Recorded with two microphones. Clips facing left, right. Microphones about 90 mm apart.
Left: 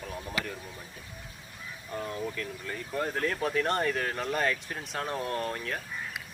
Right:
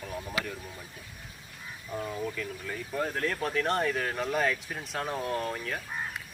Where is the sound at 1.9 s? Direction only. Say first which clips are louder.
Right 1 dB; 5° right (ahead or behind).